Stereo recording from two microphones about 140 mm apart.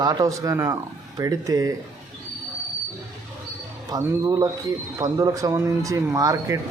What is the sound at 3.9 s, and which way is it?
Speech, 25° right (ahead or behind).